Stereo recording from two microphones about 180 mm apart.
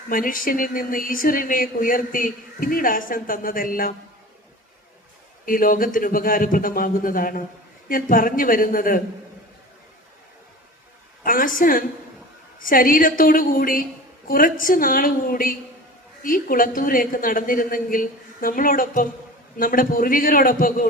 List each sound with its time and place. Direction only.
0.1 s speech: 50° left (ahead or behind)
5.5 s speech: 50° left (ahead or behind)
11.2 s speech: 50° left (ahead or behind)